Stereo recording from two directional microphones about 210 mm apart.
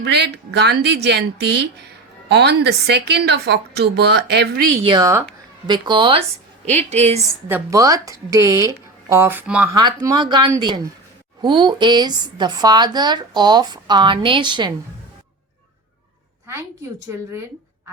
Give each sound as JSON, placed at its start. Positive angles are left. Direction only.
{"t": 0.0, "sound": "a woman's voice", "side_deg": -50}
{"t": 4.7, "sound": "a woman's voice", "side_deg": -25}
{"t": 7.4, "sound": "speech", "side_deg": -15}
{"t": 9.7, "sound": "speech", "side_deg": -20}
{"t": 16.5, "sound": "a woman's voice", "side_deg": -10}